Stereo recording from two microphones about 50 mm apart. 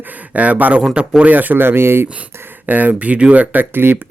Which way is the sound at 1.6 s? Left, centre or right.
Right.